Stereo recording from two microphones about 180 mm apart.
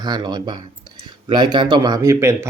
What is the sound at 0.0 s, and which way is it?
Speech, 25° right (ahead or behind).